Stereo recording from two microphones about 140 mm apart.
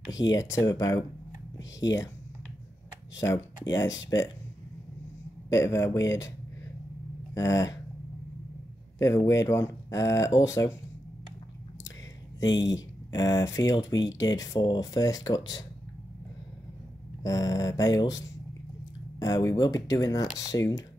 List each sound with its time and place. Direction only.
0.1 s speech: 25° left (ahead or behind)
3.2 s speech: 20° left (ahead or behind)
5.5 s speech: 20° left (ahead or behind)
7.3 s speech: 20° left (ahead or behind)
8.9 s speech: 20° left (ahead or behind)
12.4 s speech: 25° left (ahead or behind)
17.2 s speech: 25° left (ahead or behind)